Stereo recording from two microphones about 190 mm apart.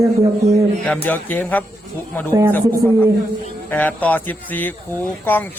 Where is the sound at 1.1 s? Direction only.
10° left (ahead or behind).